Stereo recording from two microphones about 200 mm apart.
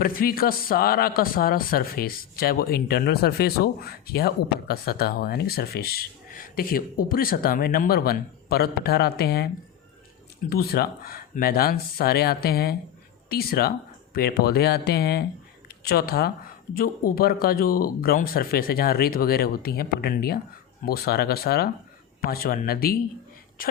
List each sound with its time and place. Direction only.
0.0 s speech: 45° left (ahead or behind)
10.5 s speech: 50° left (ahead or behind)